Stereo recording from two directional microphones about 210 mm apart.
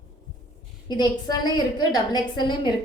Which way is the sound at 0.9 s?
20° left (ahead or behind).